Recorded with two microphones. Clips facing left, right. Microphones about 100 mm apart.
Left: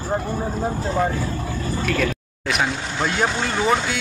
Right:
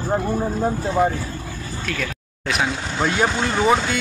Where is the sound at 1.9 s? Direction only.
Centre (ahead or behind).